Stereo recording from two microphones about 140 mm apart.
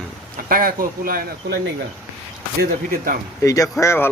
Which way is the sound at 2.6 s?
90° right.